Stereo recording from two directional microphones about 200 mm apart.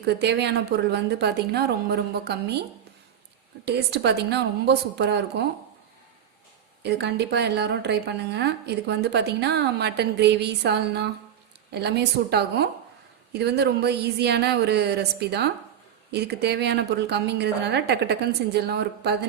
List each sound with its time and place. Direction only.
0.0 s a woman's voice: 55° right (ahead or behind)
3.7 s a woman's voice: 55° right (ahead or behind)
6.8 s a woman's voice: 55° right (ahead or behind)